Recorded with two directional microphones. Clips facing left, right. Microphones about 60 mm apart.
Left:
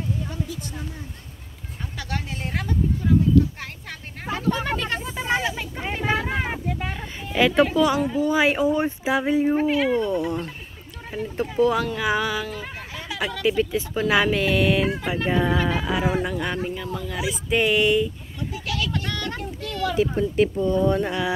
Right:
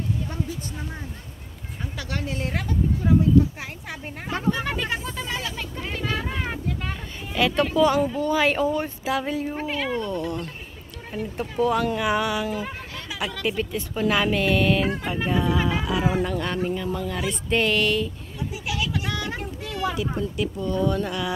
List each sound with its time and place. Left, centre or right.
2.0 s speech: centre
3.0 s speech: right
4.6 s speech: centre
5.2 s a sound: left
5.8 s speech: left
9.6 s speech: centre
9.9 s speech: left
11.1 s speech: centre
16.1 s speech: centre
18.5 s a sound: centre
20.0 s speech: left
20.5 s speech: left